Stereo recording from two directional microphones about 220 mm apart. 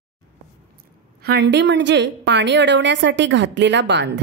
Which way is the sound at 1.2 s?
50° right (ahead or behind).